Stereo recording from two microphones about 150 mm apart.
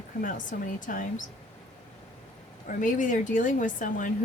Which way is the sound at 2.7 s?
60° left (ahead or behind).